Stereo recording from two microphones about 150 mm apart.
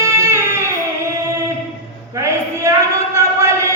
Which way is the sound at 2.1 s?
20° right (ahead or behind).